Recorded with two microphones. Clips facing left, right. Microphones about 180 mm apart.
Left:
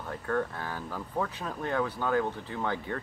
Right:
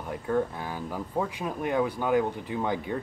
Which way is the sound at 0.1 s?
15° right (ahead or behind).